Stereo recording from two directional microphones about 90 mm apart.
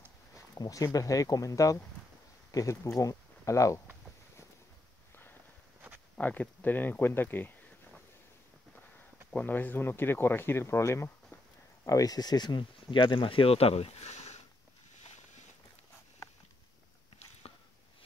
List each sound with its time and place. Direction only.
0.6 s speech: 40° left (ahead or behind)
6.1 s speech: 15° left (ahead or behind)
9.3 s speech: 20° left (ahead or behind); by 13.7 s 90° left